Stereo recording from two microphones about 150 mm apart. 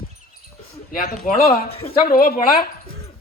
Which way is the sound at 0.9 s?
80° left.